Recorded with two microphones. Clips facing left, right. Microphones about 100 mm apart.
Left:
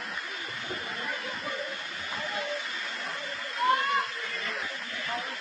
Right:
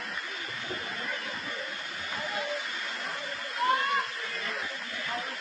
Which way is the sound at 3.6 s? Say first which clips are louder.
Left 1 dB; centre (ahead or behind).